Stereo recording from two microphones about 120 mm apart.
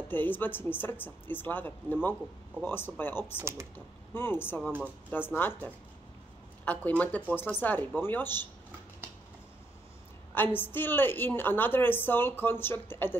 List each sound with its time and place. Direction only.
0.1 s a woman's voice: 15° left (ahead or behind)
3.3 s speech: 20° right (ahead or behind)
3.7 s a woman's voice: 20° left (ahead or behind)
6.6 s a woman's voice: 15° left (ahead or behind)
10.3 s a woman's voice: 15° left (ahead or behind)